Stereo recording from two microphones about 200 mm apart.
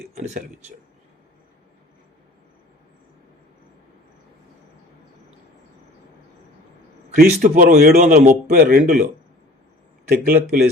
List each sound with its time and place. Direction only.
0.1 s a sound: 35° right (ahead or behind)
7.2 s a man's voice: 40° right (ahead or behind)
10.1 s speech: 50° right (ahead or behind)